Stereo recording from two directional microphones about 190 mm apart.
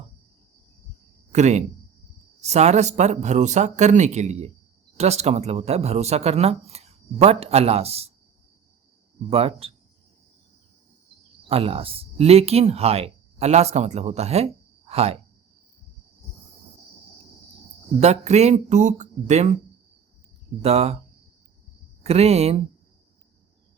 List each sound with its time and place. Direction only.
1.3 s speech: 35° right (ahead or behind)
9.3 s speech: 30° right (ahead or behind)
11.4 s speech: 30° right (ahead or behind)
18.0 s speech: 35° right (ahead or behind)
20.6 s speech: 35° right (ahead or behind)
22.0 s speech: 35° right (ahead or behind)